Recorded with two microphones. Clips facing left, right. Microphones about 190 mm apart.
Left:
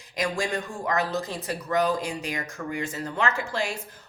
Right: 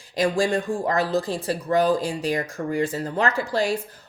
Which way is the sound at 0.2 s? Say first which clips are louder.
Right 6 dB; 30° right (ahead or behind).